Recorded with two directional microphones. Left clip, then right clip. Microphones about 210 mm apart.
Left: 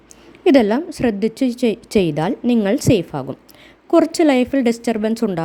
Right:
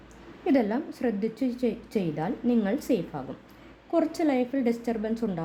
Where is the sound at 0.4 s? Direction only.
40° left (ahead or behind).